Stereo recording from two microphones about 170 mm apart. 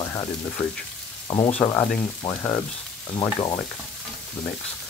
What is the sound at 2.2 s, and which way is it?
Speech, 25° left (ahead or behind).